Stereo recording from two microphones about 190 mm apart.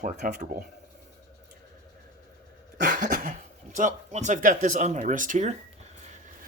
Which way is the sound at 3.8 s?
40° right (ahead or behind).